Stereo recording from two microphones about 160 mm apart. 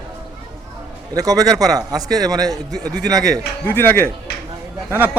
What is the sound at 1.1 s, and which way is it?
A man's voice, 20° right (ahead or behind).